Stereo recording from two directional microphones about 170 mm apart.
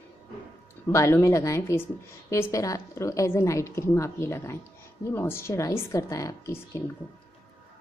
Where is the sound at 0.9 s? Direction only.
15° left (ahead or behind).